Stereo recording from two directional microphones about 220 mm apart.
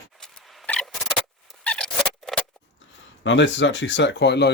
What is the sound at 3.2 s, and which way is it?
Speech, 55° left (ahead or behind).